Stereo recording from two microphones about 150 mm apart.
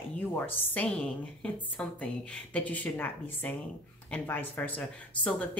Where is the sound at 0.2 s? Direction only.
15° left (ahead or behind).